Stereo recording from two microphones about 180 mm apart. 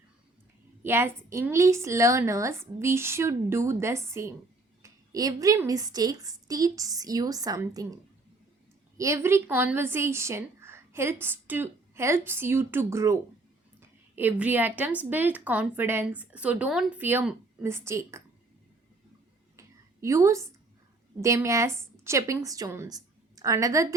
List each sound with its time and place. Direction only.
0.8 s a woman's voice: 15° right (ahead or behind)
9.0 s a woman's voice: 15° right (ahead or behind)
19.5 s a sound: 15° right (ahead or behind)
21.2 s a woman's voice: 15° right (ahead or behind)